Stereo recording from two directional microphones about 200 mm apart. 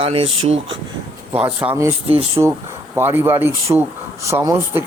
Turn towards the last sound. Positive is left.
turn(degrees=-10)  # may be behind; listen again after turning